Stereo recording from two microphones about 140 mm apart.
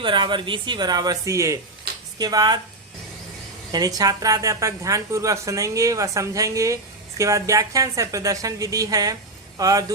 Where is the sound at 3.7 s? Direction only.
25° right (ahead or behind).